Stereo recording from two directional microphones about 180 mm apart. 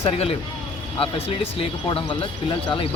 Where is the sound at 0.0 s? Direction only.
35° left (ahead or behind).